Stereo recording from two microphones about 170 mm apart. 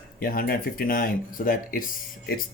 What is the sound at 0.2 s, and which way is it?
Speech, 60° left (ahead or behind).